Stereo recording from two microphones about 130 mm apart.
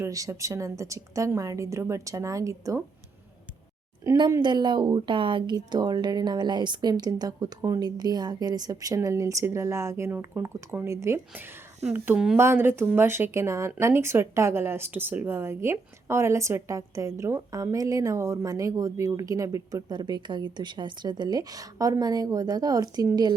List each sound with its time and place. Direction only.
0.0 s speech: 25° right (ahead or behind)
4.3 s speech: 30° right (ahead or behind); by 12.4 s 10° right (ahead or behind)
12.4 s speech: 20° right (ahead or behind)